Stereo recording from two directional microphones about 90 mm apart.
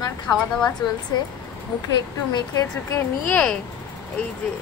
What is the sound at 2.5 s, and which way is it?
Speech, 35° left (ahead or behind).